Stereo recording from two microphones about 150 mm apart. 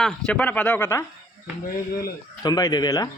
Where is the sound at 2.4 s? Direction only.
25° left (ahead or behind).